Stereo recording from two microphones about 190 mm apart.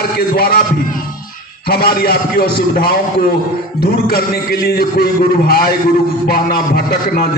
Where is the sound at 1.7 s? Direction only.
55° left (ahead or behind).